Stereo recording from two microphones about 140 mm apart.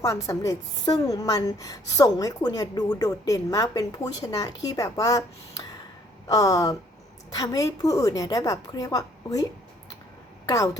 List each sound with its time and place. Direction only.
0.0 s a woman's voice: 25° left (ahead or behind)
6.2 s a woman's voice: 25° left (ahead or behind)